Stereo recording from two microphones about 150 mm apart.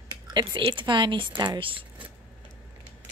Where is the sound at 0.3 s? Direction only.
30° right (ahead or behind).